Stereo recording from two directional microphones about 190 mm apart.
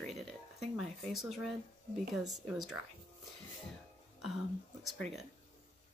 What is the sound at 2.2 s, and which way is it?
Speech, 20° right (ahead or behind).